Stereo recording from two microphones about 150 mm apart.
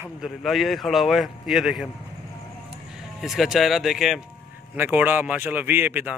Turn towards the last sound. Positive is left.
turn(degrees=-10)  # may be behind; listen again after turning